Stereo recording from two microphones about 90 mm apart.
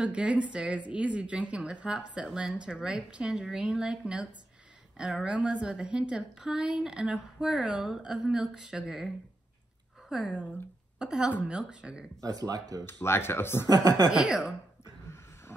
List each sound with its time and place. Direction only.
0.0 s a woman's voice: 10° right (ahead or behind)
12.2 s speech: 40° right (ahead or behind)
12.8 s speech: 25° left (ahead or behind)
13.7 s speech: 45° right (ahead or behind)
14.1 s a woman's voice: 10° right (ahead or behind)